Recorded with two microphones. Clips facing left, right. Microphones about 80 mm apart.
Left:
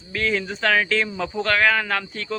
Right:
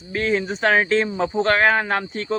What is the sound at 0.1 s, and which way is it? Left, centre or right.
Speech, right.